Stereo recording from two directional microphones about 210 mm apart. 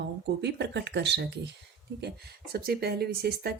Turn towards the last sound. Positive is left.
turn(degrees=-50)  # may be behind; listen again after turning